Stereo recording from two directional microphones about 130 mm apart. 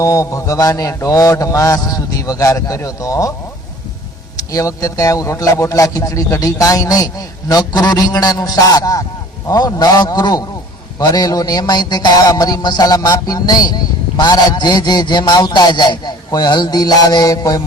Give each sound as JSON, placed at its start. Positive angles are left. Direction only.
{"t": 0.0, "sound": "a man's voice", "side_deg": 25}
{"t": 4.4, "sound": "a man's voice", "side_deg": 25}